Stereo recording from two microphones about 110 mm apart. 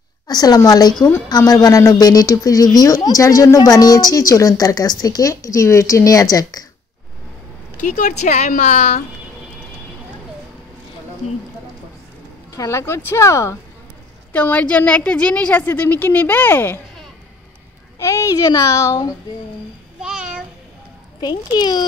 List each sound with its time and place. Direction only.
0.3 s a woman's voice: 35° left (ahead or behind)
8.1 s a woman's voice: 90° left
12.5 s a child's voice: 25° left (ahead or behind)
14.3 s a woman's voice: 15° left (ahead or behind)
17.9 s a child's voice: 30° left (ahead or behind)
20.0 s a sound: 5° right (ahead or behind)
21.2 s a woman's voice: 40° left (ahead or behind)